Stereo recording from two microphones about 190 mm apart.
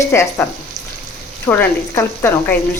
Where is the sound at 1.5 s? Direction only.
10° left (ahead or behind).